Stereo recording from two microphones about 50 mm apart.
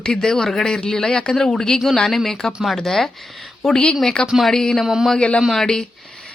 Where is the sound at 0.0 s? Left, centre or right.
Centre.